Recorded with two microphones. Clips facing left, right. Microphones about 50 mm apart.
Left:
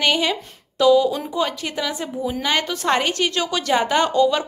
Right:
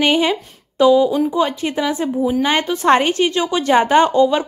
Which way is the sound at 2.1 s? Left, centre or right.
Centre.